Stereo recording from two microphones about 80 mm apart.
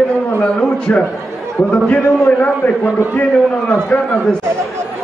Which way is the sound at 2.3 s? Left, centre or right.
Left.